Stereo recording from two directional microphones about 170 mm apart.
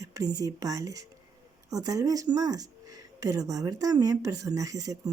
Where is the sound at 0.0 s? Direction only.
20° right (ahead or behind).